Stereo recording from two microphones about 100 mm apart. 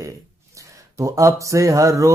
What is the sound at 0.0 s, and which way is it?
Speech, 35° right (ahead or behind).